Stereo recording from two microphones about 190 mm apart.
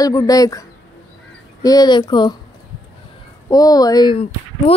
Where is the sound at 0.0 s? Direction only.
20° left (ahead or behind).